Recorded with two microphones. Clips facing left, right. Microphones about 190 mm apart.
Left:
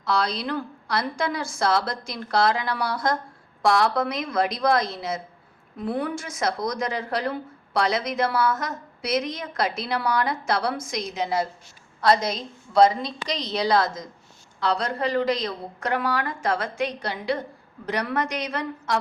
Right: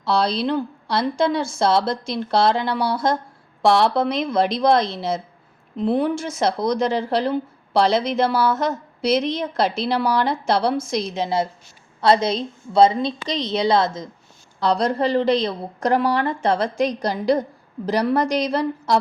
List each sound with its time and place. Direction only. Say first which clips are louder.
0.0 s speech: right 5 dB; 30° right (ahead or behind)
14.6 s a woman's voice: right 5 dB; 35° right (ahead or behind)